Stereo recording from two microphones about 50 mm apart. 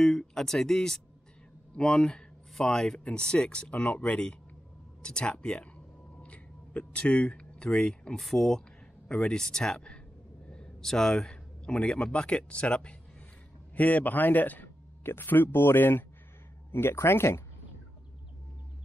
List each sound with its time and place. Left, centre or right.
0.0 s speech: centre
6.2 s a sound: left
8.2 s speech: centre
10.5 s a sound: centre
10.9 s speech: centre
13.7 s a man's voice: left
16.7 s speech: left